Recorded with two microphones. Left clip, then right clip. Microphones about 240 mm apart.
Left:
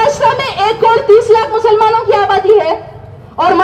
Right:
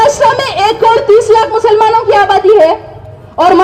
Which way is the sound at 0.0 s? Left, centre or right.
Right.